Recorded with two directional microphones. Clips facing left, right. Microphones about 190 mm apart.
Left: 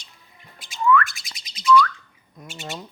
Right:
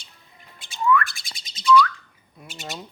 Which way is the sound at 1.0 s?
30° right (ahead or behind).